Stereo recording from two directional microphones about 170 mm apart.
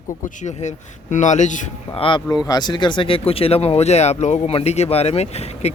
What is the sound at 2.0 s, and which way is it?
Speech, 30° left (ahead or behind).